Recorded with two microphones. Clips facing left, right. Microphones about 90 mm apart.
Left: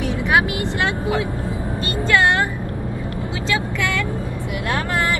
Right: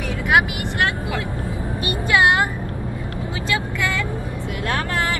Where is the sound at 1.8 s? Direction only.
15° right (ahead or behind).